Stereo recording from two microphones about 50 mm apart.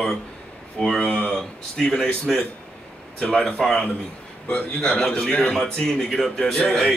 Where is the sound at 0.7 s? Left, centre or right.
Centre.